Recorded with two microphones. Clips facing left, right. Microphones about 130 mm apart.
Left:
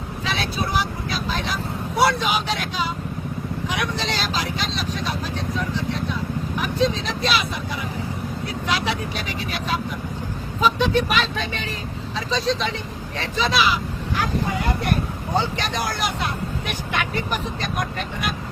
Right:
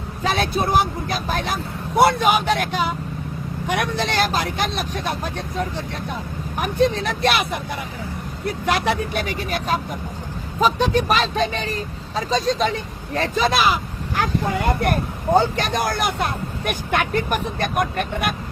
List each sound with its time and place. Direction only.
0.3 s speech: 50° right (ahead or behind)